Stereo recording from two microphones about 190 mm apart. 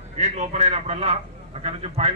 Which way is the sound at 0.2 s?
35° right (ahead or behind).